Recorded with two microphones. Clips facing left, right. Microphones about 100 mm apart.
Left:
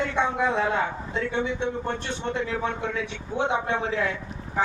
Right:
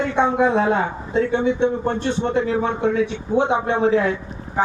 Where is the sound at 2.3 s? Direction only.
25° right (ahead or behind).